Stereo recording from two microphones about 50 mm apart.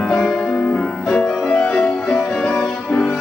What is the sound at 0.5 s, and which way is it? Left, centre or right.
Music, left.